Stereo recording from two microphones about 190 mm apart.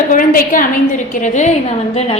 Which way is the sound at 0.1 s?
45° left (ahead or behind).